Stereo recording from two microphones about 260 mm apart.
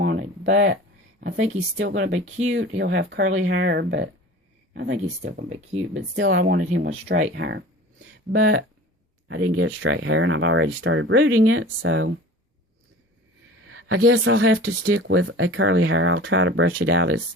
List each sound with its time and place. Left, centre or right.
0.0 s a sound: right
1.7 s speech: right
2.2 s speech: right
2.5 s speech: right
6.4 s speech: right
7.3 s speech: right
13.7 s speech: right